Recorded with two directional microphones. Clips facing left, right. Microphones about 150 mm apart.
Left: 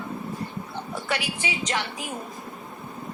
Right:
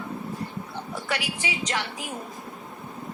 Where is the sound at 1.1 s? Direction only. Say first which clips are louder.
Left 1 dB; 25° left (ahead or behind).